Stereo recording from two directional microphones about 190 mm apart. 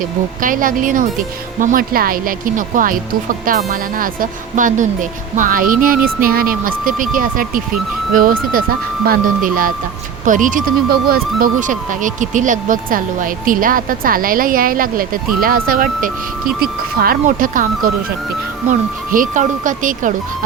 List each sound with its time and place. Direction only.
0.4 s speech: 45° right (ahead or behind)